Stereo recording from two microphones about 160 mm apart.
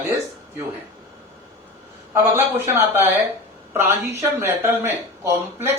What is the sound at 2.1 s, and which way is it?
Speech, 15° right (ahead or behind).